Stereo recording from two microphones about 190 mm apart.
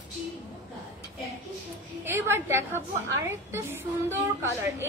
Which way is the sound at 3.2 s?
15° right (ahead or behind).